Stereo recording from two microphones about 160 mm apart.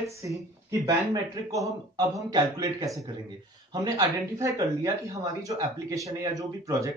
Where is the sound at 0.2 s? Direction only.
20° right (ahead or behind).